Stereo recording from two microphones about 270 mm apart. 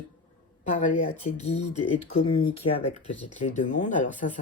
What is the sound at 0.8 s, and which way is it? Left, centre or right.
Speech, left.